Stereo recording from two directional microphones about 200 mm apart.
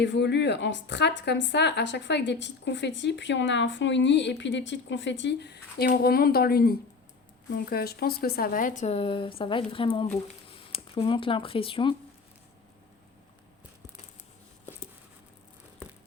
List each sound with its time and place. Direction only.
0.0 s speech: 60° left (ahead or behind); by 11.9 s 25° left (ahead or behind)